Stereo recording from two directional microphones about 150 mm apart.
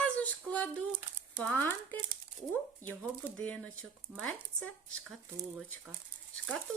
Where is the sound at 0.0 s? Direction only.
10° left (ahead or behind).